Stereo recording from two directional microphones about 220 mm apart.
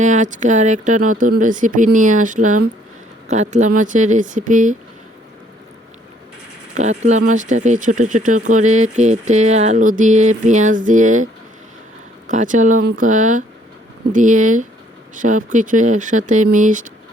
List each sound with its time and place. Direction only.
0.0 s speech: 35° right (ahead or behind)
6.7 s speech: 30° right (ahead or behind)
12.3 s speech: 35° right (ahead or behind)